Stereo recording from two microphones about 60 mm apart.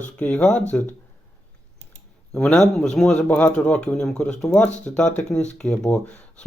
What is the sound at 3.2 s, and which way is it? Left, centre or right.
Speech, left.